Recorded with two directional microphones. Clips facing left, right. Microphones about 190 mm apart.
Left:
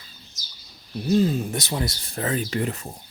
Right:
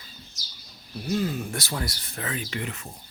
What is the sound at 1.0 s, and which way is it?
Speech, 25° left (ahead or behind).